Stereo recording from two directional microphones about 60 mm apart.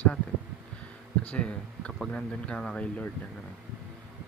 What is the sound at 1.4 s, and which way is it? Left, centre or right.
Speech, centre.